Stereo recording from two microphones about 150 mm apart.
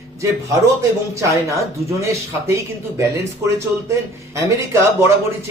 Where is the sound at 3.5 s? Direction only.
20° right (ahead or behind).